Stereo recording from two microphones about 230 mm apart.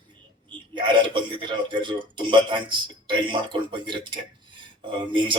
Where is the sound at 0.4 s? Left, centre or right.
Right.